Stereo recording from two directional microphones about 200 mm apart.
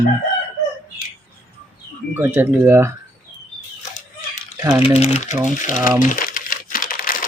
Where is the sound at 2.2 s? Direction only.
10° right (ahead or behind).